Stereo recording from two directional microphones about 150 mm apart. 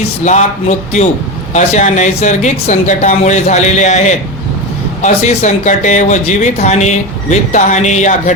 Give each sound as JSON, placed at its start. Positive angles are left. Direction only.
{"t": 0.0, "sound": "speech", "side_deg": 50}